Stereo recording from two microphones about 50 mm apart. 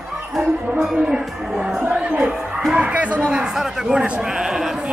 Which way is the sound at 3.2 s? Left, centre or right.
Centre.